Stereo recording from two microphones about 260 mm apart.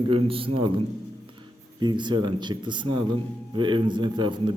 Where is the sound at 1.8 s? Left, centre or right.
Centre.